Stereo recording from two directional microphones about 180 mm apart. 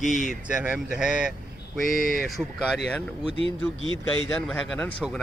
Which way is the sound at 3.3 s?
30° right (ahead or behind).